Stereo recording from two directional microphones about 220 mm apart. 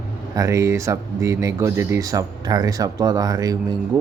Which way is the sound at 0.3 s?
15° right (ahead or behind).